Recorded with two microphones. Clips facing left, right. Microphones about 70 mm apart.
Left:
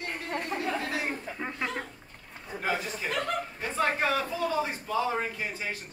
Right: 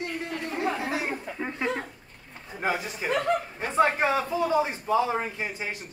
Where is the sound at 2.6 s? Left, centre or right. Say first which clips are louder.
Right 3 dB; centre.